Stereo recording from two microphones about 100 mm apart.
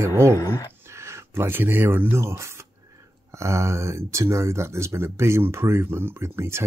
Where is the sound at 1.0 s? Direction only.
25° right (ahead or behind).